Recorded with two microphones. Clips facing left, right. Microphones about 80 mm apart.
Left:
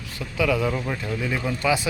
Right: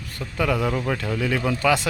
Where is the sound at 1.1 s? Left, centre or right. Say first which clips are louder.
Right 2 dB; right.